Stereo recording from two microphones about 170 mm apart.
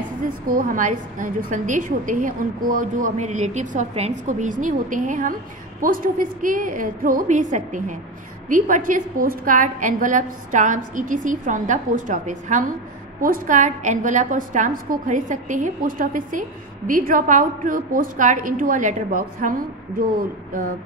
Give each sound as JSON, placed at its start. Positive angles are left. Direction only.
{"t": 0.2, "sound": "a woman's voice", "side_deg": -55}